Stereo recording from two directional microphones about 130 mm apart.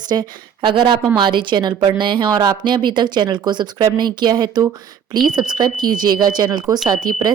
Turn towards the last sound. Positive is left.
turn(degrees=-30)  # may be behind; listen again after turning